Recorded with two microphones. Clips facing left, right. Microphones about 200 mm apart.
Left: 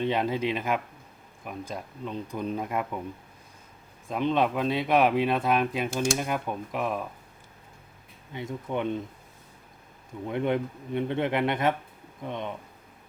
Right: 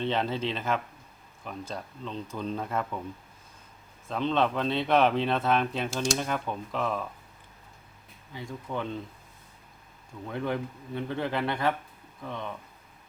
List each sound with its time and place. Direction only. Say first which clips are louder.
0.0 s speech: left 2 dB; 10° left (ahead or behind)
4.1 s speech: left 1 dB; 10° left (ahead or behind)
5.9 s speech: left 2 dB; 55° left (ahead or behind)
6.1 s speech: left 1 dB; 10° left (ahead or behind)
8.3 s speech: left 4 dB; 20° left (ahead or behind)
10.2 s speech: left 4 dB; 20° left (ahead or behind)